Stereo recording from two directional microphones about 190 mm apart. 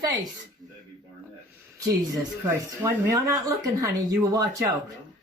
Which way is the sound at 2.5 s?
15° right (ahead or behind).